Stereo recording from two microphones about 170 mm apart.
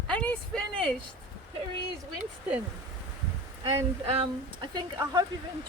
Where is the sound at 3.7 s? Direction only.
35° right (ahead or behind).